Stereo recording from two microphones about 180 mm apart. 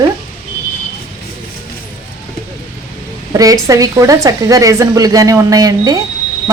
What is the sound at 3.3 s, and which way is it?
A woman's voice, 20° right (ahead or behind).